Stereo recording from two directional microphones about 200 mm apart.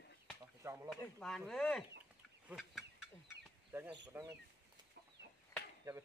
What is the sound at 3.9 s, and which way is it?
Speech, 15° right (ahead or behind).